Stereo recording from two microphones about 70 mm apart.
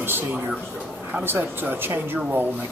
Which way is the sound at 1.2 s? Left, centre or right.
Right.